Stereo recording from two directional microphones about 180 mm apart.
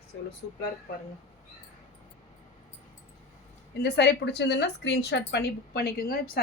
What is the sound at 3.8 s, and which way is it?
A woman's voice, 70° left (ahead or behind).